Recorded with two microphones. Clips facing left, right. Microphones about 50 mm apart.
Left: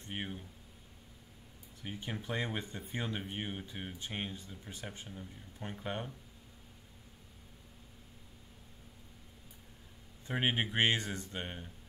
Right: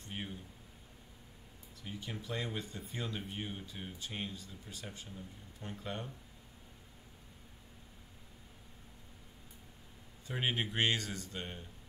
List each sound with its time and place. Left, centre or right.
0.1 s a sound: left
1.8 s speech: left
10.2 s speech: left